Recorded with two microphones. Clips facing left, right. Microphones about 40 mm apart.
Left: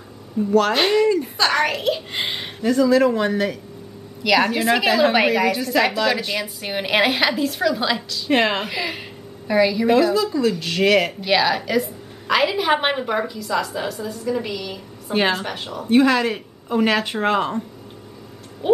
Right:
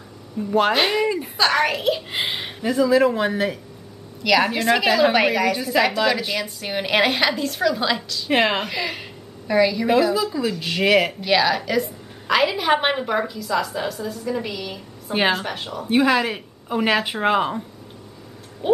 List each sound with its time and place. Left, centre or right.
0.5 s speech: centre
0.7 s a woman's voice: centre